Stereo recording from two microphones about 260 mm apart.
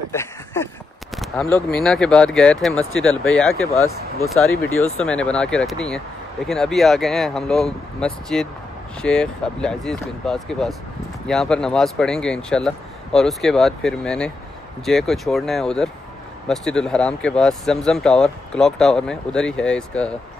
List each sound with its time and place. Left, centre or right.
0.1 s a sound: centre
1.1 s speech: centre
4.5 s speech: left
4.9 s speech: centre